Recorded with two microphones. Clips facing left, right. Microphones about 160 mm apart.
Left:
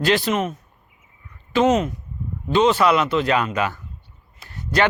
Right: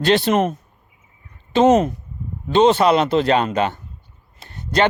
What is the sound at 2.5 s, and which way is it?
Speech, 30° right (ahead or behind).